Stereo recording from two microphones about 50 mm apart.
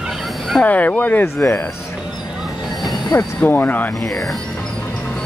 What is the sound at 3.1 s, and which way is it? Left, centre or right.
Speech, left.